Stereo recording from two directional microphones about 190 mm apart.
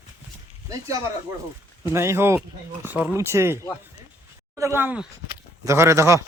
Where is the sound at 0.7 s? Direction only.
15° right (ahead or behind).